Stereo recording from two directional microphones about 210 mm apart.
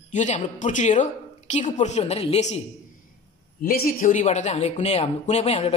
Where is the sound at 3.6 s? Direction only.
45° left (ahead or behind).